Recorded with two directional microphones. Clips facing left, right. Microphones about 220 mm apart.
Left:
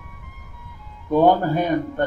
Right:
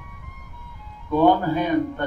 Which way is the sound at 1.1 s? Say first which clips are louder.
Left 1 dB; 50° left (ahead or behind).